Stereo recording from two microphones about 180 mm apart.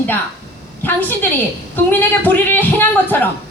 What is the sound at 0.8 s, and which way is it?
A woman's voice, 10° left (ahead or behind).